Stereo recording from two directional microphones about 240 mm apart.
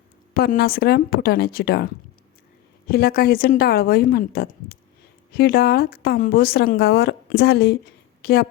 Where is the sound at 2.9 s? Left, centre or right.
Left.